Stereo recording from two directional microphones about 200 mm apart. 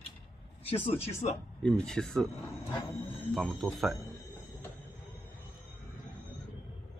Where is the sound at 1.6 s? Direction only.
Centre (ahead or behind).